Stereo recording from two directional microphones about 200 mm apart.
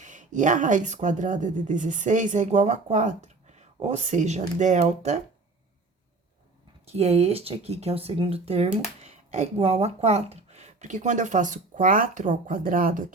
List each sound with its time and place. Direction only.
0.0 s speech: 40° right (ahead or behind)
6.8 s speech: 30° right (ahead or behind)